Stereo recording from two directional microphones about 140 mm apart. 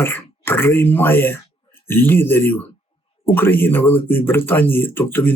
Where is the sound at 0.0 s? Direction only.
15° left (ahead or behind).